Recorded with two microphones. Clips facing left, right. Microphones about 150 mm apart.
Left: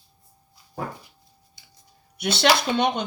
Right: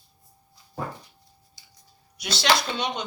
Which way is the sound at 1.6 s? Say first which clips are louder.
Left 1 dB; 60° left (ahead or behind).